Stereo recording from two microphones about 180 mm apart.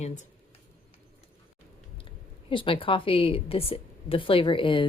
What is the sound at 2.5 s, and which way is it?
A woman's voice, 30° left (ahead or behind).